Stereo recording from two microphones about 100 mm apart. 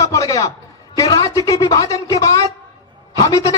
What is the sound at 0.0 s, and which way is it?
A man's voice, 30° left (ahead or behind).